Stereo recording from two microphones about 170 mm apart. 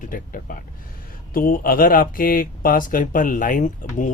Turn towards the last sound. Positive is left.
turn(degrees=50)  # may be behind; listen again after turning